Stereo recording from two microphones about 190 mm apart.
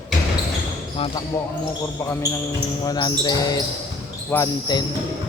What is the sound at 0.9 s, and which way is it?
Speech, 30° left (ahead or behind).